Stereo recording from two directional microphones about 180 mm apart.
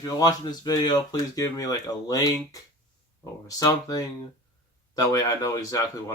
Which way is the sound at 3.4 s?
20° left (ahead or behind).